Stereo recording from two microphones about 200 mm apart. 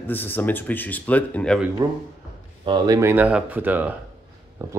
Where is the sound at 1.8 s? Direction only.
20° right (ahead or behind).